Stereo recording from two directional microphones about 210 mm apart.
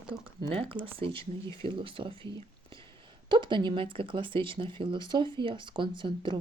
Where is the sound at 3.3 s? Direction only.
20° right (ahead or behind).